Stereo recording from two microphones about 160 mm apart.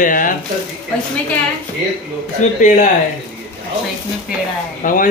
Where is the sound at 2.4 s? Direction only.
50° left (ahead or behind).